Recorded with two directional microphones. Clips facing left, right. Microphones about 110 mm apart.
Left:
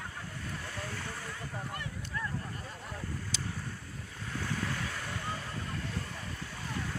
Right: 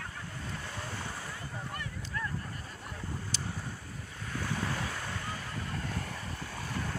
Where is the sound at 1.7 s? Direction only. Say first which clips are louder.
Even; 20° left (ahead or behind).